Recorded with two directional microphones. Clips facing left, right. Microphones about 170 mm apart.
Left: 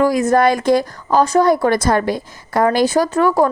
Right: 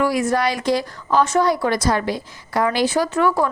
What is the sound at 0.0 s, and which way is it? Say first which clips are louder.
A woman's voice: left 5 dB; 45° left (ahead or behind).